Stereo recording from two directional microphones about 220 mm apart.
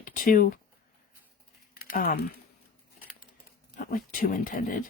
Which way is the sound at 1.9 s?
40° left (ahead or behind).